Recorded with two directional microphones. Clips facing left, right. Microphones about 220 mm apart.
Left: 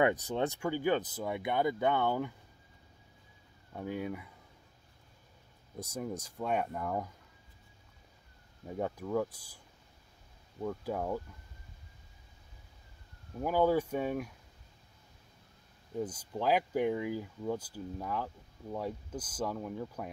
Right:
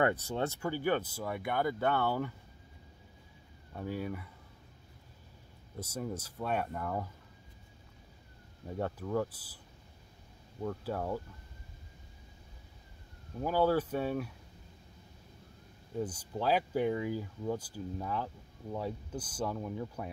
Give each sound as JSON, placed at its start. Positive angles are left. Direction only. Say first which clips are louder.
{"t": 0.0, "sound": "speech", "louder": "left 2 dB", "side_deg": 15}
{"t": 3.7, "sound": "speech", "louder": "even", "side_deg": 15}
{"t": 5.8, "sound": "speech", "louder": "even", "side_deg": 15}
{"t": 8.6, "sound": "speech", "louder": "left 1 dB", "side_deg": 10}
{"t": 10.6, "sound": "speech", "louder": "left 1 dB", "side_deg": 10}
{"t": 13.4, "sound": "speech", "louder": "left 1 dB", "side_deg": 15}
{"t": 16.0, "sound": "speech", "louder": "even", "side_deg": 10}